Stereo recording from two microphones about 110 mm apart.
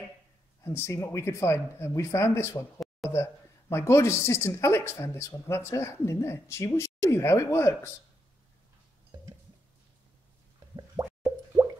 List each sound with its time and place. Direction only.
0.6 s speech: 25° left (ahead or behind)